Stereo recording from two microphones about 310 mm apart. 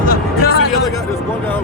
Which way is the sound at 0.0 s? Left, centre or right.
Left.